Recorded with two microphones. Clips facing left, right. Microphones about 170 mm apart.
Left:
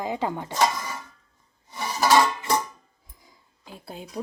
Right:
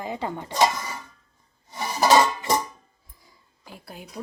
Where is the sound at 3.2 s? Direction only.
25° left (ahead or behind).